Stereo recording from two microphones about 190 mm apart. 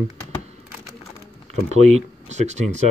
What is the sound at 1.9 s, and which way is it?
Speech, 35° right (ahead or behind).